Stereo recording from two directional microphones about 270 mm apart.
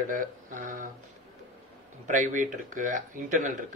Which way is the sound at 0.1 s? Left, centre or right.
Right.